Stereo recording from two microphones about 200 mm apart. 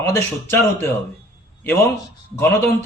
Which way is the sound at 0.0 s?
15° left (ahead or behind).